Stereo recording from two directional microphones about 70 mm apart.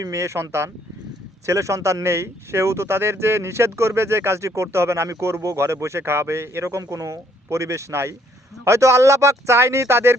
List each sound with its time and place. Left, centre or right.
0.0 s speech: right